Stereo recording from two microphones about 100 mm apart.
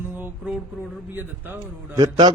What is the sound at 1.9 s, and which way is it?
Speech, 45° right (ahead or behind).